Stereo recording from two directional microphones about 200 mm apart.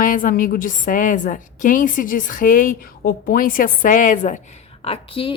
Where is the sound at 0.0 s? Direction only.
45° left (ahead or behind).